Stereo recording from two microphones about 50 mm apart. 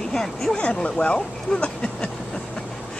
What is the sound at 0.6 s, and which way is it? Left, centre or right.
Speech, left.